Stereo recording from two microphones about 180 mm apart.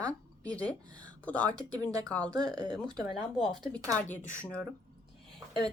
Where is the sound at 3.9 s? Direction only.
10° left (ahead or behind).